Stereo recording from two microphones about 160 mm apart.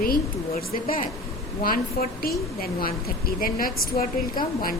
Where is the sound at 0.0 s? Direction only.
65° left (ahead or behind).